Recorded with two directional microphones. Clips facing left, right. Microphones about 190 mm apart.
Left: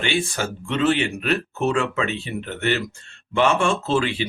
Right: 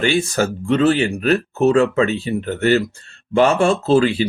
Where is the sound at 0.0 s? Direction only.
40° right (ahead or behind).